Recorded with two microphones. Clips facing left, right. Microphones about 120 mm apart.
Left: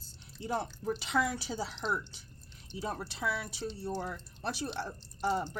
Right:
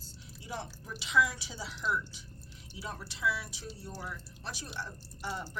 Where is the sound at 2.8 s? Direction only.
45° left (ahead or behind).